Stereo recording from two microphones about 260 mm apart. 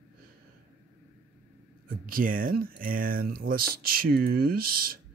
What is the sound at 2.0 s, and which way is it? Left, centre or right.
Speech, right.